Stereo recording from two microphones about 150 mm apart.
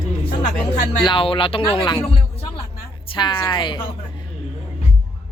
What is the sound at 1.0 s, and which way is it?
Speech, 35° left (ahead or behind).